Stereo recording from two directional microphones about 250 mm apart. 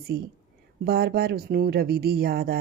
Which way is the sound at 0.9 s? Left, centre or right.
Right.